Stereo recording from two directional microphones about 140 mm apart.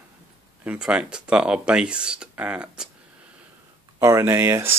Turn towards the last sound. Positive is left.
turn(degrees=-15)  # may be behind; listen again after turning